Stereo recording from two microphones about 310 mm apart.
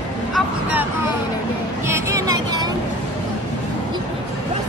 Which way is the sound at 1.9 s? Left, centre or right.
Centre.